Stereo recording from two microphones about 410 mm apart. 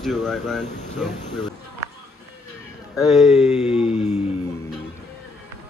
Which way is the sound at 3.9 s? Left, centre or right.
Centre.